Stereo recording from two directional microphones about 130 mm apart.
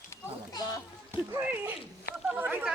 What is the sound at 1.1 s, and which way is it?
Speech, 15° right (ahead or behind).